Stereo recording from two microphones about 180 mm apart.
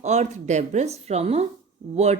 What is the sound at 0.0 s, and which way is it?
A woman's voice, 40° right (ahead or behind).